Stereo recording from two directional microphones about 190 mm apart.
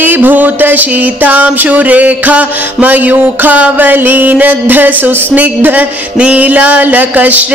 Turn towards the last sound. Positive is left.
turn(degrees=-10)  # may be behind; listen again after turning